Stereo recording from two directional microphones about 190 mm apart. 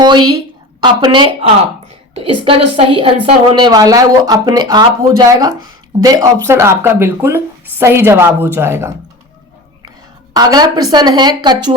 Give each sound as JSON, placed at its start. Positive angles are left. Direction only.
{"t": 0.0, "sound": "a woman's voice", "side_deg": -25}
{"t": 10.3, "sound": "speech", "side_deg": -20}